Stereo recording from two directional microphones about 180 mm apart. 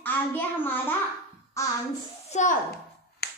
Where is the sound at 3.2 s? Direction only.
60° left (ahead or behind).